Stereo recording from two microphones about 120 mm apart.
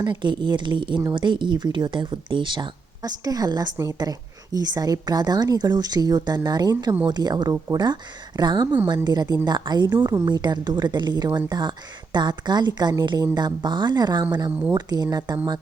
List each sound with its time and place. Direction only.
0.0 s speech: 40° right (ahead or behind)